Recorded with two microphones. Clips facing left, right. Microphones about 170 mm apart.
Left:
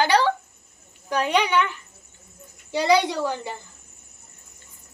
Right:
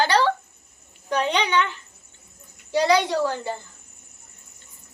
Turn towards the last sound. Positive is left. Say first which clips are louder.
# right 2 dB
turn(degrees=15)  # may be behind; listen again after turning